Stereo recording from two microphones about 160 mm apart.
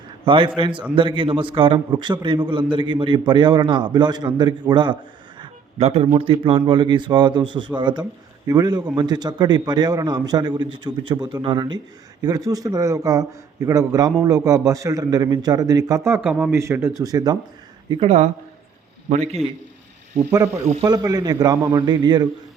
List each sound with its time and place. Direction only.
0.3 s a man's voice: 30° right (ahead or behind)
5.4 s music: 35° right (ahead or behind)
6.1 s a man's voice: 35° right (ahead or behind)
19.0 s a man's voice: 40° right (ahead or behind)
20.8 s a man's voice: 25° right (ahead or behind)